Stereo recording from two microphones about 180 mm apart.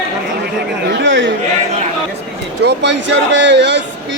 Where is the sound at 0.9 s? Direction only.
85° right.